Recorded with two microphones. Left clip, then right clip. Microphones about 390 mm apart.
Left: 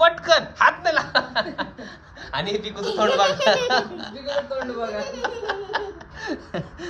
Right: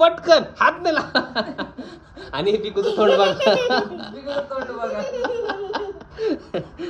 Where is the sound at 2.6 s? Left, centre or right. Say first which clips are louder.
Right 3 dB; centre.